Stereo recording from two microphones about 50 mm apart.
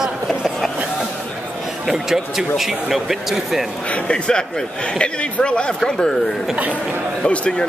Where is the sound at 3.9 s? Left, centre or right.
Centre.